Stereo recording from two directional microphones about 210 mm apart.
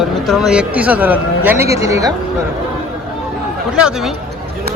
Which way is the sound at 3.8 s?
5° right (ahead or behind).